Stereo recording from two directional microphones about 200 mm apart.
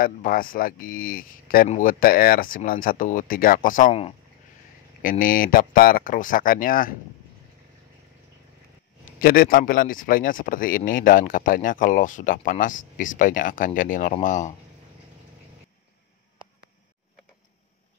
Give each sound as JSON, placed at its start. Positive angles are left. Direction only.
{"t": 0.0, "sound": "a man's voice", "side_deg": 45}
{"t": 9.0, "sound": "a man's voice", "side_deg": 45}